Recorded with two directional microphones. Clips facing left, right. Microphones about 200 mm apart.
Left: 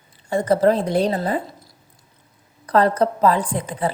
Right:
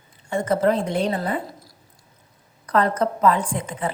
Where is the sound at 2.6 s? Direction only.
35° left (ahead or behind).